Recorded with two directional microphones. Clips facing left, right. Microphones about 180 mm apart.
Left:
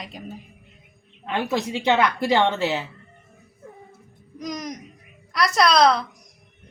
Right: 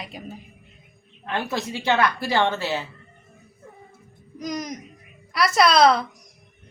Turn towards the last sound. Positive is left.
turn(degrees=0)  # may be behind; listen again after turning